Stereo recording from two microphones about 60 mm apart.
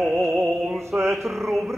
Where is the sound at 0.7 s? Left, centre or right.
Right.